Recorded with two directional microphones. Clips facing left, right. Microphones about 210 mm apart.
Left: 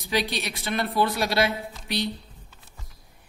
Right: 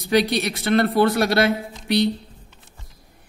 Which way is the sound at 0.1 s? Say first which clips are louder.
Right 8 dB; 60° right (ahead or behind).